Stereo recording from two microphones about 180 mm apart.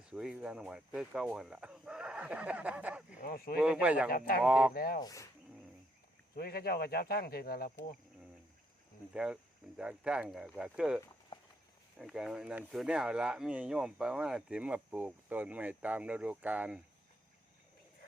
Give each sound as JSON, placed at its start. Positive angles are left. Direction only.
{"t": 0.1, "sound": "speech", "side_deg": -5}
{"t": 3.2, "sound": "speech", "side_deg": 55}
{"t": 3.6, "sound": "speech", "side_deg": -5}
{"t": 4.7, "sound": "speech", "side_deg": 55}
{"t": 4.9, "sound": "speech", "side_deg": 20}
{"t": 6.3, "sound": "speech", "side_deg": 60}
{"t": 9.1, "sound": "speech", "side_deg": -5}